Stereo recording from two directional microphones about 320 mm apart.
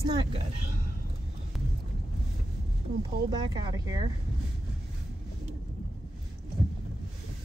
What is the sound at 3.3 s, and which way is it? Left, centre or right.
Speech, centre.